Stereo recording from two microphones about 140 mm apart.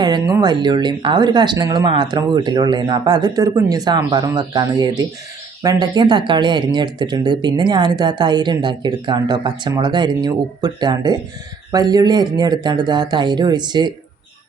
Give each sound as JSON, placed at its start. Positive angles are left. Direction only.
{"t": 0.0, "sound": "speech", "side_deg": -25}